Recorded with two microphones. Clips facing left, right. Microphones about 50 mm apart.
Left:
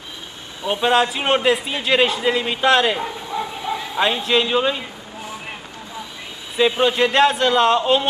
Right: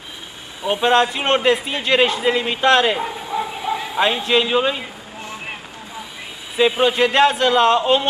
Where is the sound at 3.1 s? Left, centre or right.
Right.